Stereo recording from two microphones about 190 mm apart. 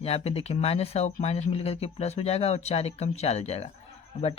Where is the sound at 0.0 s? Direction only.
30° left (ahead or behind).